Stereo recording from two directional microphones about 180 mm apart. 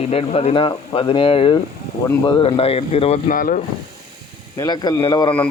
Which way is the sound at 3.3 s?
50° left (ahead or behind).